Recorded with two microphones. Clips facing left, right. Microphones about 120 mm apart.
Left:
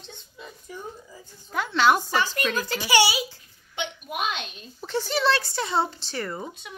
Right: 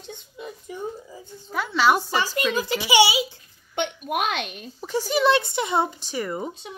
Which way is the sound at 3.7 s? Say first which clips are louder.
Right 6 dB; 55° right (ahead or behind).